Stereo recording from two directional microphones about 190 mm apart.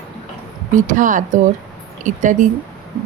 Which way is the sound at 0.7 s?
45° right (ahead or behind).